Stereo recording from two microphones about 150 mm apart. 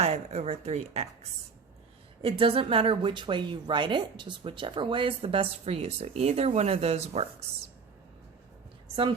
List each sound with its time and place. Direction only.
0.0 s speech: 45° right (ahead or behind)
2.2 s a woman's voice: 40° right (ahead or behind)